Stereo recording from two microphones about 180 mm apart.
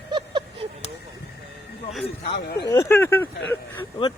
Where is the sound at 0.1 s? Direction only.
25° right (ahead or behind).